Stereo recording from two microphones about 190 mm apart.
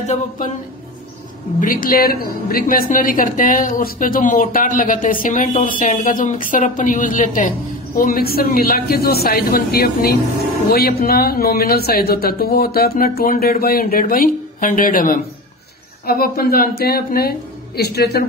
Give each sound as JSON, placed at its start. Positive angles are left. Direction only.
{"t": 0.0, "sound": "a man's voice", "side_deg": 35}
{"t": 1.6, "sound": "a woman's voice", "side_deg": 45}